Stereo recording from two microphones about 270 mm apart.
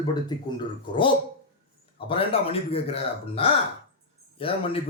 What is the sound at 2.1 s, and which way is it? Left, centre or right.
Speech, left.